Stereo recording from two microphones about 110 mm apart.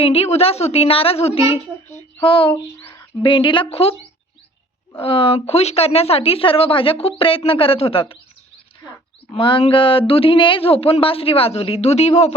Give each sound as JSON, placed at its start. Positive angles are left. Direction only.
{"t": 0.0, "sound": "a woman's voice", "side_deg": 65}
{"t": 4.9, "sound": "speech", "side_deg": 55}
{"t": 9.4, "sound": "speech", "side_deg": 50}